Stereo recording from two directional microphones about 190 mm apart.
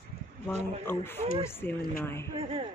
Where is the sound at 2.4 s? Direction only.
30° right (ahead or behind).